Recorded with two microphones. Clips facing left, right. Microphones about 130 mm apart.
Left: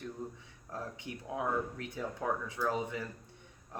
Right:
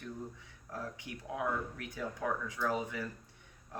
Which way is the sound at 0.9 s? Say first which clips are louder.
Left 3 dB; 25° left (ahead or behind).